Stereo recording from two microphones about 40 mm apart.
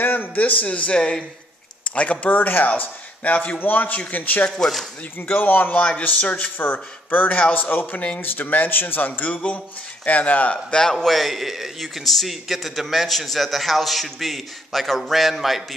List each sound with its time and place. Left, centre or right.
0.0 s a sound: left
0.4 s a man's voice: left
0.9 s speech: centre
2.0 s speech: left
4.5 s speech: centre
5.4 s speech: left
5.8 s a man's voice: left
7.6 s speech: left
9.3 s a man's voice: left
10.7 s speech: centre
11.1 s a man's voice: centre